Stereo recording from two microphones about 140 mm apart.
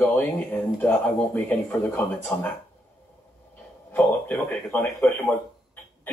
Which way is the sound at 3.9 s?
15° left (ahead or behind).